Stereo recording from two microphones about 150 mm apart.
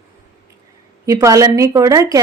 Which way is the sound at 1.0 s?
25° right (ahead or behind).